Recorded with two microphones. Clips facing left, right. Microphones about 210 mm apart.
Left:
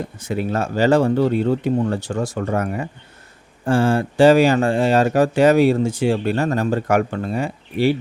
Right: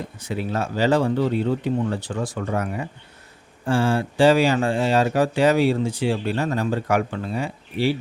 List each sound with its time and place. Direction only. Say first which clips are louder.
0.2 s speech: left 3 dB; 45° left (ahead or behind)